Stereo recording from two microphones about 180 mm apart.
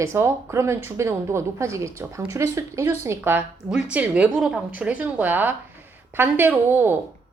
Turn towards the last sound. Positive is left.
turn(degrees=-10)  # may be behind; listen again after turning